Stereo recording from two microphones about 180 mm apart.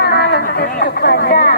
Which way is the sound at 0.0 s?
60° left (ahead or behind).